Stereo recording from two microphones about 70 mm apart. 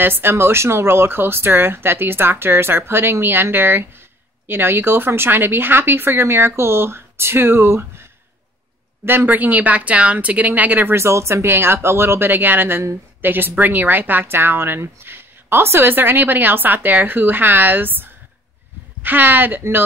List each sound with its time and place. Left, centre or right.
0.0 s speech: right
11.0 s speech: right